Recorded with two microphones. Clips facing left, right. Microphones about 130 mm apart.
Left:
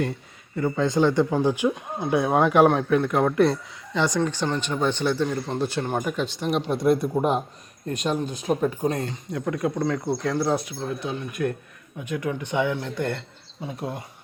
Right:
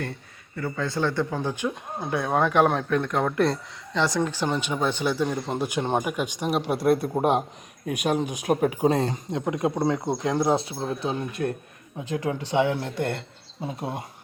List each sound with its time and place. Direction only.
0.5 s speech: 20° left (ahead or behind); by 7.0 s 5° right (ahead or behind)
7.2 s a man's voice: 60° right (ahead or behind)
8.2 s speech: 15° right (ahead or behind)
8.4 s speech: 70° right (ahead or behind)
9.3 s speech: 25° right (ahead or behind)